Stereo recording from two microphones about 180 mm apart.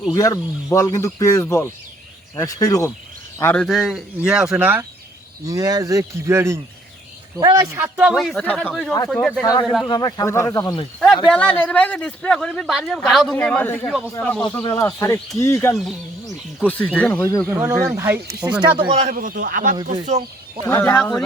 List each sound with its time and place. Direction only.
0.1 s speech: 20° left (ahead or behind)
3.3 s a man's voice: 10° left (ahead or behind)
9.4 s speech: 25° left (ahead or behind)
11.3 s a man's voice: 5° left (ahead or behind)
14.4 s speech: 25° left (ahead or behind)
15.7 s a man's voice: centre (ahead or behind)
17.4 s speech: 10° right (ahead or behind)
18.9 s speech: 35° right (ahead or behind)
19.1 s speech: 50° right (ahead or behind)
20.7 s speech: 10° left (ahead or behind)